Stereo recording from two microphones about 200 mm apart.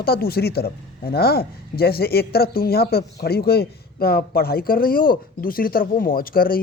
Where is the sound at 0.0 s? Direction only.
50° left (ahead or behind).